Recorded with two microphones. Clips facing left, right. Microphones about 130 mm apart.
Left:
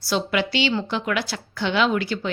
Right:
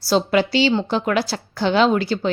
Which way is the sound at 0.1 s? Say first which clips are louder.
Right 6 dB; 35° right (ahead or behind).